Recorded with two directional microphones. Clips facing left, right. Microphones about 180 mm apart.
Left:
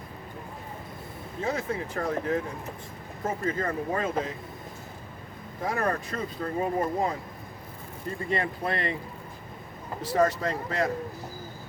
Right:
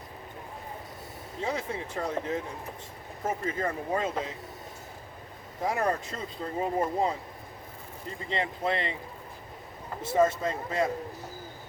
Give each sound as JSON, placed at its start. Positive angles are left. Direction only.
{"t": 1.4, "sound": "speech", "side_deg": -20}
{"t": 3.4, "sound": "speech", "side_deg": -20}
{"t": 5.6, "sound": "speech", "side_deg": -20}
{"t": 8.3, "sound": "speech", "side_deg": -20}
{"t": 10.0, "sound": "speech", "side_deg": -25}